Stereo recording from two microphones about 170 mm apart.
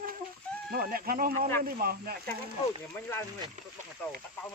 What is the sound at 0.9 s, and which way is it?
Speech, 55° right (ahead or behind).